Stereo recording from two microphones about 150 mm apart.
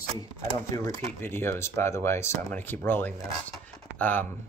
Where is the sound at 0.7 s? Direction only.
20° left (ahead or behind).